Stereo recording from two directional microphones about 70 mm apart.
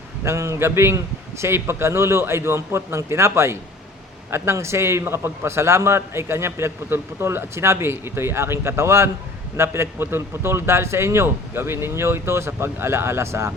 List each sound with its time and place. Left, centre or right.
0.3 s a man's voice: right